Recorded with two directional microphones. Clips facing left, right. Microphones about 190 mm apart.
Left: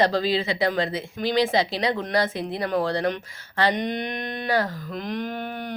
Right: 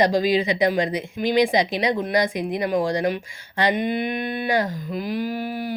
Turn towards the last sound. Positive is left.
turn(degrees=-5)  # may be behind; listen again after turning